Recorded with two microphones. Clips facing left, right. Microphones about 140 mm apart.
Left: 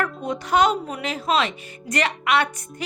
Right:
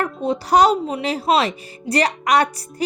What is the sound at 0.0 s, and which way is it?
Speech, 30° right (ahead or behind).